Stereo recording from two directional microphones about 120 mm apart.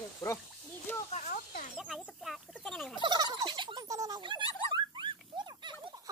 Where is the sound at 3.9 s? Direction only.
30° right (ahead or behind).